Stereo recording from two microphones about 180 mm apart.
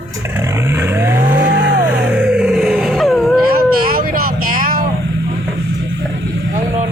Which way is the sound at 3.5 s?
55° right (ahead or behind).